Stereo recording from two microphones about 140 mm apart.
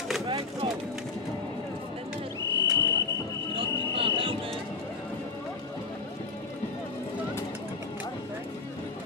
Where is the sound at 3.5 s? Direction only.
40° right (ahead or behind).